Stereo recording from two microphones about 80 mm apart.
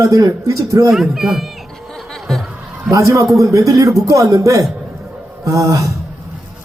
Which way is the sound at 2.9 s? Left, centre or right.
Right.